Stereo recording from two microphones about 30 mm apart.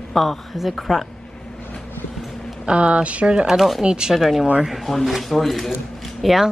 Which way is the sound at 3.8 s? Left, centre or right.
Right.